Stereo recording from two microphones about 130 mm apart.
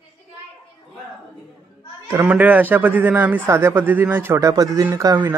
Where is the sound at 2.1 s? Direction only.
15° right (ahead or behind).